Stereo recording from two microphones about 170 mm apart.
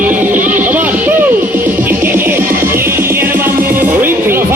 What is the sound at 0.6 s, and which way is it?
Music, 10° right (ahead or behind).